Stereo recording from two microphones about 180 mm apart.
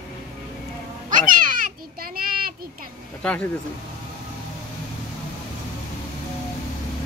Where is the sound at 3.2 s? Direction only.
10° left (ahead or behind).